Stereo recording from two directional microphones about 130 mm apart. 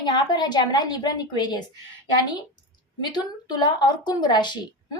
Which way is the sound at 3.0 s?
35° left (ahead or behind).